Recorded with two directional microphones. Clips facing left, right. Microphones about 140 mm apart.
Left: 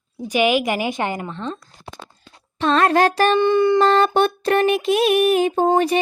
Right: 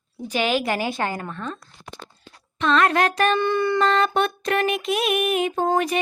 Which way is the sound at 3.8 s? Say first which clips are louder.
Left 4 dB; 30° left (ahead or behind).